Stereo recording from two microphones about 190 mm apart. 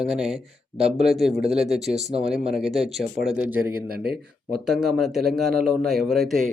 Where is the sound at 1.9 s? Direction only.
35° right (ahead or behind).